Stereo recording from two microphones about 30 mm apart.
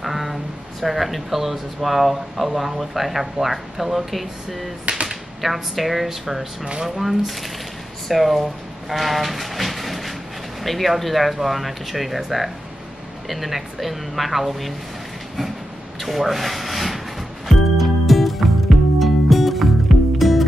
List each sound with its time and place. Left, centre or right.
0.0 s speech: centre
8.1 s train: centre
10.6 s speech: centre
16.0 s rub: centre
17.5 s music: centre